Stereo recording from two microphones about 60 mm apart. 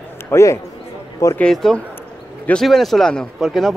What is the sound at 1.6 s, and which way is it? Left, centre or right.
Speech, centre.